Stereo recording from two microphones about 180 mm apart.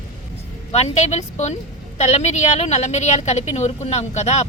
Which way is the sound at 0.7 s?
40° left (ahead or behind).